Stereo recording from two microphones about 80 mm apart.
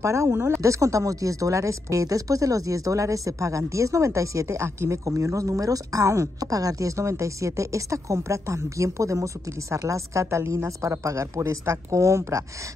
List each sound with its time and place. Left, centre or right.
0.0 s speech: right